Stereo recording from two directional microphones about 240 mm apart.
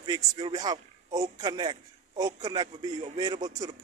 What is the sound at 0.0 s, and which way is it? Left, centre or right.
A man's voice, centre.